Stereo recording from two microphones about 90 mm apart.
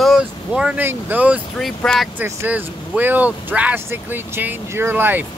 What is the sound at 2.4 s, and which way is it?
Speech, 20° right (ahead or behind).